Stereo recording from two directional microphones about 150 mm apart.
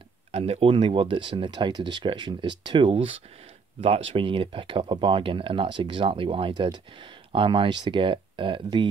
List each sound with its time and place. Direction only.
0.3 s speech: 40° right (ahead or behind)